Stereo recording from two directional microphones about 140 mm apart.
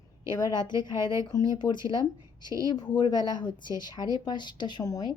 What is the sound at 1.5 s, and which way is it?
A woman's voice, 30° left (ahead or behind).